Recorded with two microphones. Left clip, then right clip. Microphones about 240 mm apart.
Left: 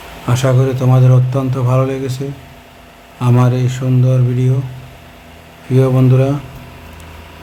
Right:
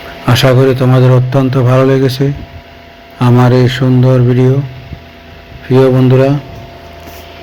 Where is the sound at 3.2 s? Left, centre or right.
Centre.